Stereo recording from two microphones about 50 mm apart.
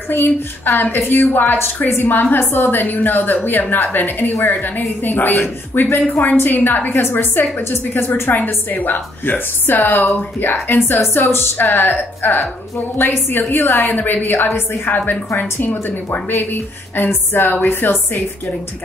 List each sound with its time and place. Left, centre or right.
0.1 s a woman's voice: left
7.0 s a woman's voice: left
14.9 s a woman's voice: left